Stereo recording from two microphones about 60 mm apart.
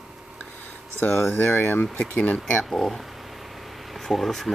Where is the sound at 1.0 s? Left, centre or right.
Left.